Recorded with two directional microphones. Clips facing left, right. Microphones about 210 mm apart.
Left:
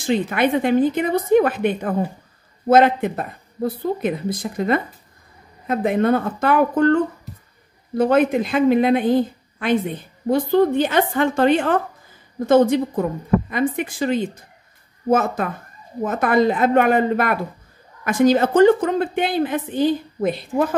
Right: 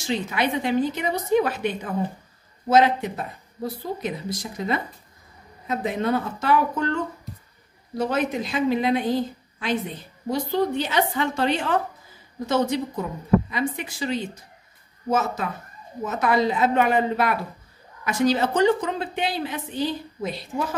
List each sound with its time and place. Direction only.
0.0 s a woman's voice: 55° left (ahead or behind)
8.0 s a woman's voice: 55° left (ahead or behind)